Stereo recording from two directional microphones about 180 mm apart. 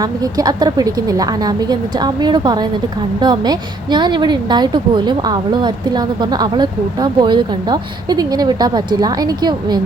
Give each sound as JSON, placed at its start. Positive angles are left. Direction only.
{"t": 0.0, "sound": "a woman's voice", "side_deg": -20}